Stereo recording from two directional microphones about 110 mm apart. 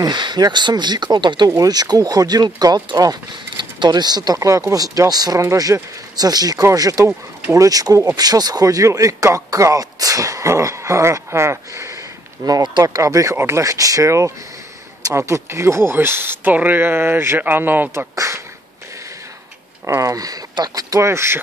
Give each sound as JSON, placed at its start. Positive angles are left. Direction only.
{"t": 0.0, "sound": "speech", "side_deg": -40}
{"t": 12.4, "sound": "speech", "side_deg": -40}
{"t": 20.0, "sound": "speech", "side_deg": -30}